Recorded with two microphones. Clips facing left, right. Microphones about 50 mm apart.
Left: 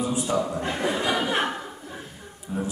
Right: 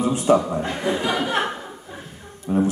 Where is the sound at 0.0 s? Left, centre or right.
Right.